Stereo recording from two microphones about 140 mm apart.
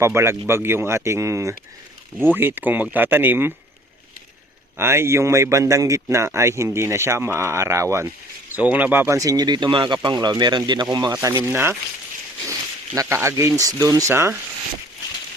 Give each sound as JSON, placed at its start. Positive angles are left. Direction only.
{"t": 0.0, "sound": "speech", "side_deg": -20}
{"t": 4.8, "sound": "speech", "side_deg": -15}